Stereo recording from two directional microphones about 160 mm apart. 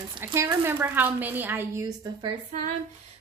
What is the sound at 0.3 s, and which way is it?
A woman's voice, 15° right (ahead or behind).